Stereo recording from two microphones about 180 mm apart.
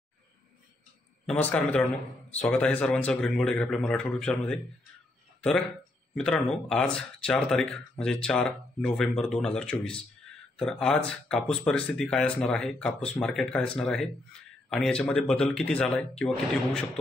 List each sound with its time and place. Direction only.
1.2 s speech: 5° left (ahead or behind)
6.1 s speech: 5° left (ahead or behind)